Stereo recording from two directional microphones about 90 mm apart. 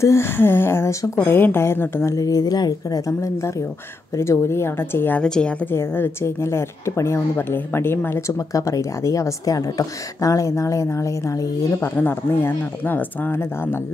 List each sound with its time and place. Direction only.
0.0 s a woman's voice: 30° left (ahead or behind)
5.2 s a woman's voice: 10° left (ahead or behind)
5.7 s a woman's voice: 25° left (ahead or behind)
8.5 s a woman's voice: 40° left (ahead or behind)
11.8 s a woman's voice: 25° left (ahead or behind)